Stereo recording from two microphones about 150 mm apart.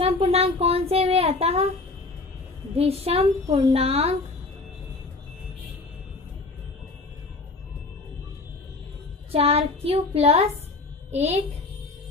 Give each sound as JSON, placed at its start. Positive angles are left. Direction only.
{"t": 0.0, "sound": "speech", "side_deg": -40}
{"t": 2.7, "sound": "a woman's voice", "side_deg": -40}
{"t": 9.3, "sound": "child singing", "side_deg": -40}
{"t": 11.1, "sound": "a child's voice", "side_deg": -45}